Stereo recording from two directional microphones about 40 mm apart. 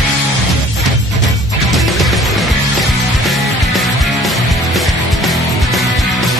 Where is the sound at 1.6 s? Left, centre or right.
Centre.